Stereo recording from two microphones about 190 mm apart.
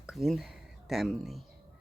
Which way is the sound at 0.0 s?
Centre (ahead or behind).